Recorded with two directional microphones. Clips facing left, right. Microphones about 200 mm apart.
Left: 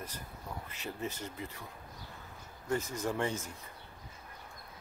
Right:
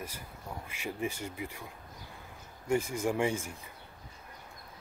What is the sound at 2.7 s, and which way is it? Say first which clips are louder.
Speech: right 4 dB; 10° right (ahead or behind).